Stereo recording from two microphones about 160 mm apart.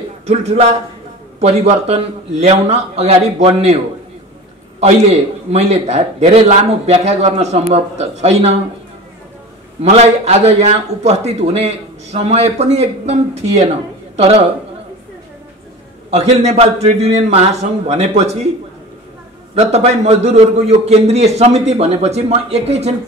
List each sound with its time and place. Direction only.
0.3 s a man's voice: 40° right (ahead or behind)
9.8 s a man's voice: 45° right (ahead or behind)
16.1 s a man's voice: 45° right (ahead or behind)
19.5 s a man's voice: 40° right (ahead or behind)